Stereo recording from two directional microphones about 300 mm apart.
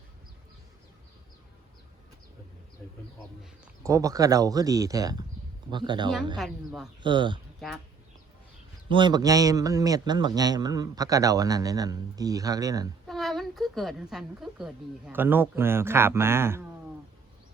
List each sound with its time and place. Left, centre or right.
3.4 s a man's voice: centre
6.3 s speech: centre
7.0 s a man's voice: centre
8.9 s a man's voice: centre
13.1 s a man's voice: centre